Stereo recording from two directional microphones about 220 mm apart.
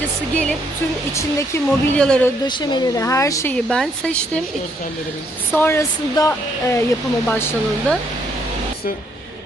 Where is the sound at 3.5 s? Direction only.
5° left (ahead or behind).